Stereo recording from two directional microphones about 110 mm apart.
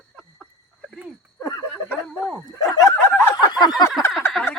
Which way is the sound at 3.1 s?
15° left (ahead or behind).